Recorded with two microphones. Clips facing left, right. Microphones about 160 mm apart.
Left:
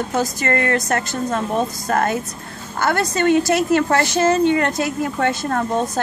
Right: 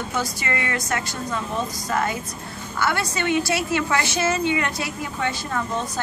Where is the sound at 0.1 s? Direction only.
45° left (ahead or behind).